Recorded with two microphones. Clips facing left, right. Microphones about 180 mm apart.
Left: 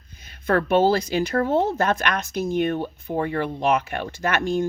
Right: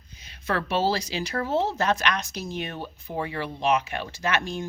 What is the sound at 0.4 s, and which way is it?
Speech, 55° left (ahead or behind).